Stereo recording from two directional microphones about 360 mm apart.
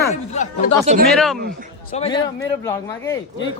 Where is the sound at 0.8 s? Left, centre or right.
Right.